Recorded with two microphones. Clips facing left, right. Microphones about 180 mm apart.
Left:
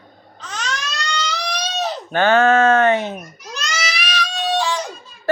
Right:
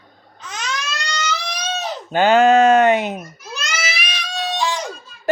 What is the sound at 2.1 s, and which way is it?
Speech, 15° right (ahead or behind).